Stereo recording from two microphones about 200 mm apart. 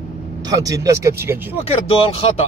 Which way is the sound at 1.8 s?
30° left (ahead or behind).